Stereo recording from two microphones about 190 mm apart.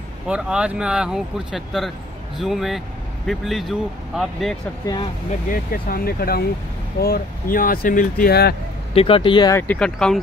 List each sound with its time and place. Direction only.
0.3 s speech: 5° right (ahead or behind)
4.8 s speech: 20° left (ahead or behind)
5.5 s speech: 50° left (ahead or behind)
8.9 s speech: 30° left (ahead or behind)
9.6 s speech: 5° left (ahead or behind)